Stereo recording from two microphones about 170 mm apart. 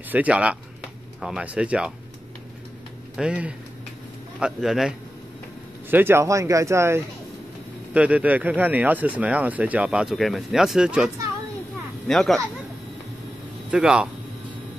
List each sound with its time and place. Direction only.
0.1 s speech: 10° right (ahead or behind)
3.2 s a man's voice: 5° right (ahead or behind)
5.9 s speech: 15° right (ahead or behind)
12.1 s a man's voice: centre (ahead or behind)
13.7 s speech: 5° right (ahead or behind)